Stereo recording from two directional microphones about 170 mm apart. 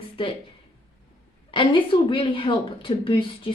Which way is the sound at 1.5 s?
30° left (ahead or behind).